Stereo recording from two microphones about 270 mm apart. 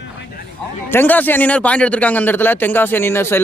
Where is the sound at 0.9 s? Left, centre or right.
Centre.